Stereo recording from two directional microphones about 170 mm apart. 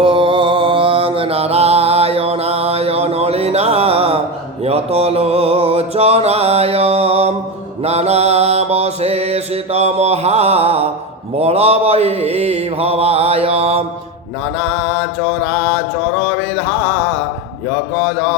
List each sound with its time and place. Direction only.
0.0 s mantra: 30° right (ahead or behind)
4.6 s music: 35° right (ahead or behind)
7.9 s mantra: 40° right (ahead or behind)
14.8 s music: 5° left (ahead or behind)